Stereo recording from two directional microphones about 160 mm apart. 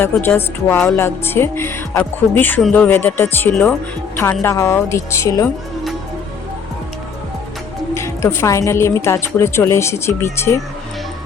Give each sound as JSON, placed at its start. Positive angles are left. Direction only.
{"t": 0.0, "sound": "a woman's voice", "side_deg": 15}
{"t": 4.2, "sound": "a woman's voice", "side_deg": 15}
{"t": 7.9, "sound": "a woman's voice", "side_deg": 15}